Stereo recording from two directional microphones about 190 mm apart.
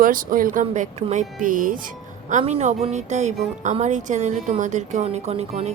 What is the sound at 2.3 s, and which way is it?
A woman's voice, 35° right (ahead or behind).